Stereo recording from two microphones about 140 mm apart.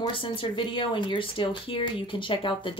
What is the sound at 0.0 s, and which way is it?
Speech, 35° left (ahead or behind).